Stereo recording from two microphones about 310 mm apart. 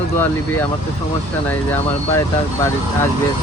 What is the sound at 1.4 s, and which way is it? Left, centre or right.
Speech, centre.